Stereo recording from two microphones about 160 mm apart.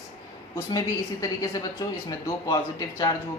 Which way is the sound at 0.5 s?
20° left (ahead or behind).